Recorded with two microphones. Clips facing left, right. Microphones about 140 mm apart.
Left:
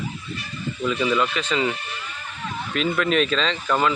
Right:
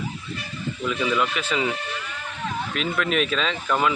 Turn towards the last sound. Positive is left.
turn(degrees=-5)  # may be behind; listen again after turning